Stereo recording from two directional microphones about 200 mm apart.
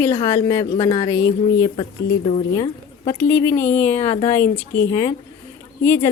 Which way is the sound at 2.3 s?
30° left (ahead or behind).